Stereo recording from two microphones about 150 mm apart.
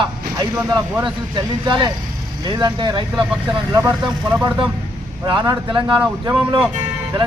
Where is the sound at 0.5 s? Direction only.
25° right (ahead or behind).